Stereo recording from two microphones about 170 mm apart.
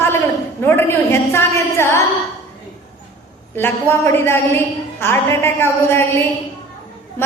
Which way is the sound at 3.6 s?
10° left (ahead or behind).